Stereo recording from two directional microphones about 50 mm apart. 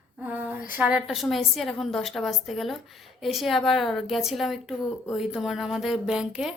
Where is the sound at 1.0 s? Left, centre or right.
Centre.